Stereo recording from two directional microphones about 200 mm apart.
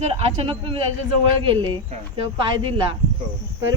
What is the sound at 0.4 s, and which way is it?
Speech, 25° right (ahead or behind).